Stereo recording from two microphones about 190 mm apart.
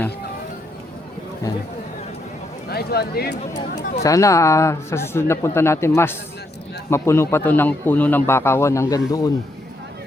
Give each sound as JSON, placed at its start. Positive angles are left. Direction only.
{"t": 2.6, "sound": "speech", "side_deg": 55}
{"t": 4.0, "sound": "a man's voice", "side_deg": 15}